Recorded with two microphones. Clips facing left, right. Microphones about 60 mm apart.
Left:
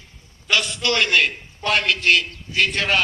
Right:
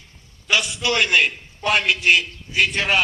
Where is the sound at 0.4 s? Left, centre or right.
Centre.